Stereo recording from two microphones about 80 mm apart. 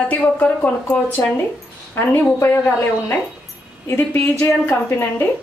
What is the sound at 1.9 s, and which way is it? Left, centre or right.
A woman's voice, left.